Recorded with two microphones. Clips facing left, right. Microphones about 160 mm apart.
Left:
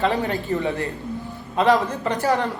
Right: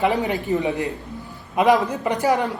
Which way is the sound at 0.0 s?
15° right (ahead or behind).